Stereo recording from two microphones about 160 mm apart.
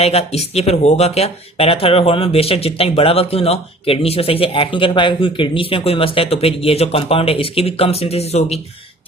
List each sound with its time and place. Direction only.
0.0 s speech: 40° left (ahead or behind)